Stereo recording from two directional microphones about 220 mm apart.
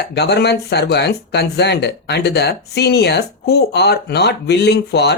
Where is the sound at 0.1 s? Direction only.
50° left (ahead or behind).